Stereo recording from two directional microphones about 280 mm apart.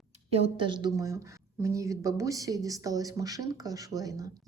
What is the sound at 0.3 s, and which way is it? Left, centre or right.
A woman's voice, right.